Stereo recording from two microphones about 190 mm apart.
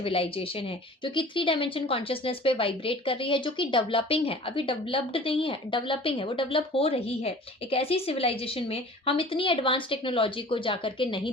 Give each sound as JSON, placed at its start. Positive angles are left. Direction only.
{"t": 0.0, "sound": "a woman's voice", "side_deg": 30}